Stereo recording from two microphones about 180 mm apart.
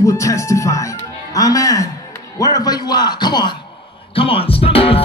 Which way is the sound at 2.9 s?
25° left (ahead or behind).